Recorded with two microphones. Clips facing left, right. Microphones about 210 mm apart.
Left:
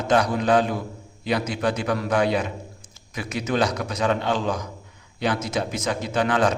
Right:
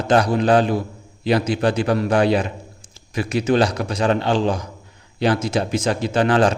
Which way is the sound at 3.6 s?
30° right (ahead or behind).